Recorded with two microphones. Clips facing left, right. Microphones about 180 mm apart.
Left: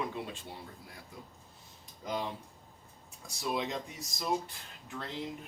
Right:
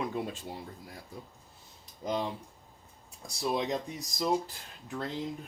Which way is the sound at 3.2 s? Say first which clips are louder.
Right 3 dB; 30° right (ahead or behind).